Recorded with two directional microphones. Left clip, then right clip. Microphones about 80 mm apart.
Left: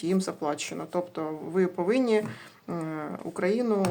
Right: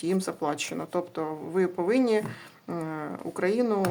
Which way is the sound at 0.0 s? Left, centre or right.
Centre.